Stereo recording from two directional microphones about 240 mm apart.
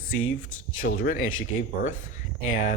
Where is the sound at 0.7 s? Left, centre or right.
Left.